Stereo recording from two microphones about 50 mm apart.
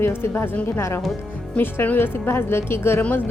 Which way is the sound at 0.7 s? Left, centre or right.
Left.